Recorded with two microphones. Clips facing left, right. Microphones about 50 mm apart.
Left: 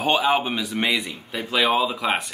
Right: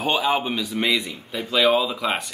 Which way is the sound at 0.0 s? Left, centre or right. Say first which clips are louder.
Left 2 dB; centre.